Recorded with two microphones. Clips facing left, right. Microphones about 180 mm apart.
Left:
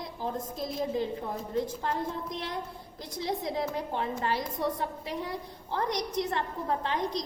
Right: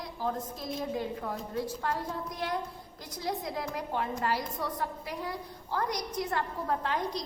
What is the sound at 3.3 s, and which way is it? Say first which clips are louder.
A woman's voice: left 2 dB; 25° left (ahead or behind).